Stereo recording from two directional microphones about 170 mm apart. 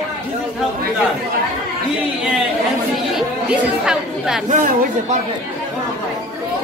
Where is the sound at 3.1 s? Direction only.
5° right (ahead or behind).